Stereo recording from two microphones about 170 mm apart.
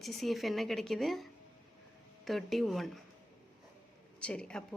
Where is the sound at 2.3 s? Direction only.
Centre (ahead or behind).